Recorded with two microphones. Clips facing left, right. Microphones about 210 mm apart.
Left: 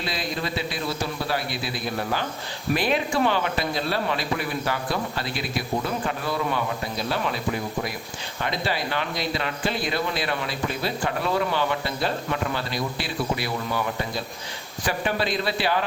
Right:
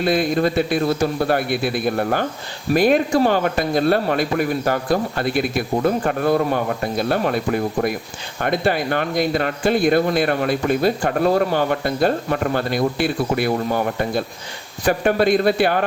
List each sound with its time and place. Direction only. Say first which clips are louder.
0.0 s speech: right 12 dB; 55° right (ahead or behind)